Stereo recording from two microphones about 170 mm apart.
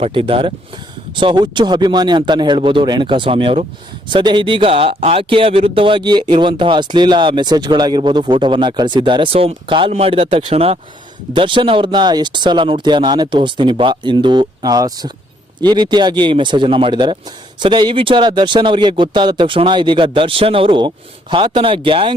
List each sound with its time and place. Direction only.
0.0 s speech: 30° right (ahead or behind)